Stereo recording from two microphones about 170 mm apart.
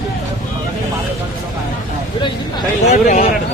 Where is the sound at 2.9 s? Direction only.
45° left (ahead or behind).